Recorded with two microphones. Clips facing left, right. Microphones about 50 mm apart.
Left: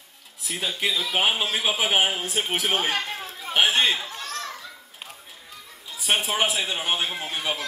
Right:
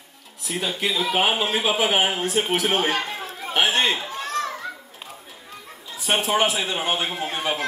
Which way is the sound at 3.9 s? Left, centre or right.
Right.